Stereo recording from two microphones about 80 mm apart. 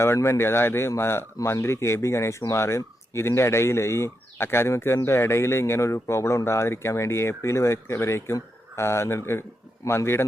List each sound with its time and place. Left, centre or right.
0.0 s speech: left